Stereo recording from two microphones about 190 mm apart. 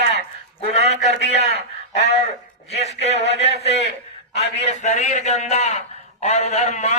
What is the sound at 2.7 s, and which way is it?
A man's voice, 35° left (ahead or behind).